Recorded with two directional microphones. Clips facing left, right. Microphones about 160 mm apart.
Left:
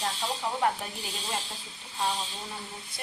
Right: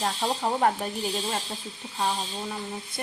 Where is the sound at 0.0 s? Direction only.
45° right (ahead or behind).